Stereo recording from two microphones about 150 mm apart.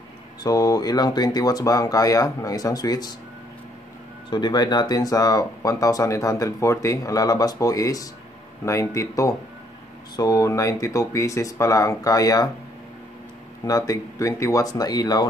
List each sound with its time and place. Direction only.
0.4 s speech: 25° left (ahead or behind)
4.3 s speech: 30° left (ahead or behind)
13.7 s speech: 25° left (ahead or behind)